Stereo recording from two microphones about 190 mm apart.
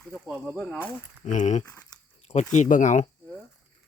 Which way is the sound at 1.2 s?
40° left (ahead or behind).